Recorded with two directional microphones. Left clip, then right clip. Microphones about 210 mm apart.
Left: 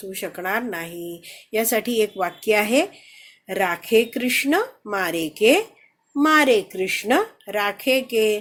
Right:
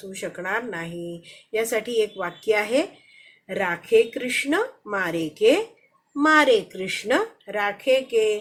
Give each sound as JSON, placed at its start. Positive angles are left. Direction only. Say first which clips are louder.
{"t": 0.1, "sound": "speech", "louder": "left 2 dB", "side_deg": 45}